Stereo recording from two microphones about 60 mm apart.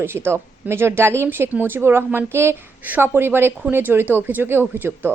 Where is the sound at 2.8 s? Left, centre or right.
Right.